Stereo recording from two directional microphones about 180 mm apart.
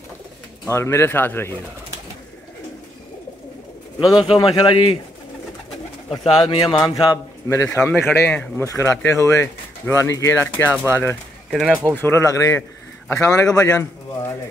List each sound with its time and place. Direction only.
0.7 s speech: 15° left (ahead or behind)
4.4 s a man's voice: 25° left (ahead or behind)
6.0 s a man's voice: 25° left (ahead or behind)
7.8 s speech: 5° left (ahead or behind)
11.5 s speech: centre (ahead or behind)
12.0 s speech: 15° left (ahead or behind)